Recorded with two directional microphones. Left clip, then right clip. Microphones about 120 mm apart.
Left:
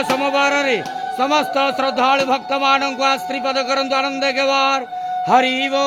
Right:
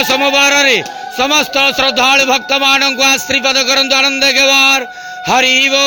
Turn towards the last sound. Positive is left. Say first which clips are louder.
# right 5 dB
turn(degrees=-15)  # may be behind; listen again after turning